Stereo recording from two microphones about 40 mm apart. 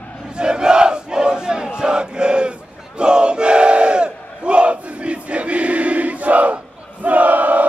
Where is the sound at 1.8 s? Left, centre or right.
Right.